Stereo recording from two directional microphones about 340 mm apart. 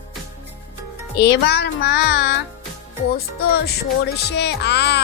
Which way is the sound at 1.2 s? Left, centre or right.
Left.